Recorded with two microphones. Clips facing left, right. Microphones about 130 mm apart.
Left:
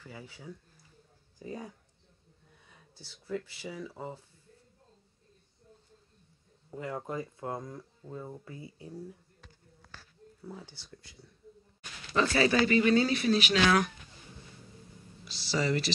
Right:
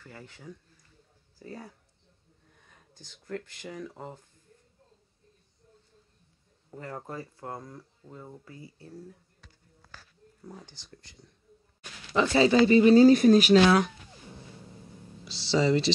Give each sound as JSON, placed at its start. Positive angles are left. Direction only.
{"t": 0.0, "sound": "speech", "side_deg": 10}
{"t": 3.0, "sound": "speech", "side_deg": 5}
{"t": 6.7, "sound": "speech", "side_deg": 10}
{"t": 10.4, "sound": "speech", "side_deg": 10}
{"t": 12.1, "sound": "speech", "side_deg": -20}
{"t": 13.7, "sound": "speech", "side_deg": -25}
{"t": 15.3, "sound": "speech", "side_deg": -20}